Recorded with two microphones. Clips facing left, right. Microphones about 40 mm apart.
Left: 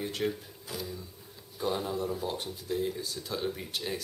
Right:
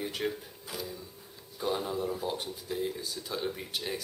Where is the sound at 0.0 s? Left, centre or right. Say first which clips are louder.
Left 1 dB; centre.